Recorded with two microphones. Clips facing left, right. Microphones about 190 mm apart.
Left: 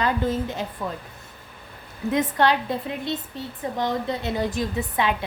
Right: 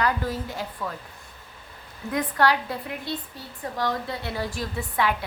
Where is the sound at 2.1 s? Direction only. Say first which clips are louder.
Left 2 dB; 20° left (ahead or behind).